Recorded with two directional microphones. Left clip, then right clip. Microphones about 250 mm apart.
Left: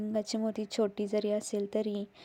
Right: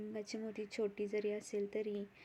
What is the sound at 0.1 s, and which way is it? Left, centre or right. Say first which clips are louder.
Speech: left 11 dB; left.